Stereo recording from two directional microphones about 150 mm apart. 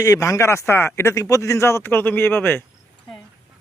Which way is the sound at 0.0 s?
20° left (ahead or behind).